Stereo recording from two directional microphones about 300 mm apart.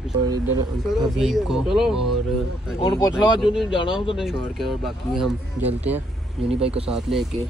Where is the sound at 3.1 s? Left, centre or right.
Centre.